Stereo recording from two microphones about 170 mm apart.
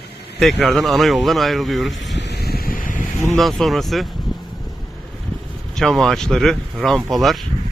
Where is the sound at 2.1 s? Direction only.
80° left; by 3.0 s 55° left (ahead or behind).